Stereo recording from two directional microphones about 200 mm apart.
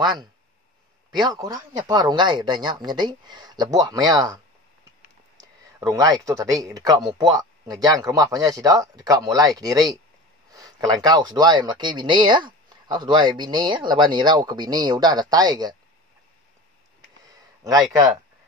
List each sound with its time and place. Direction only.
1.1 s speech: 20° right (ahead or behind)
5.4 s speech: 20° right (ahead or behind)
17.2 s a sound: 20° right (ahead or behind)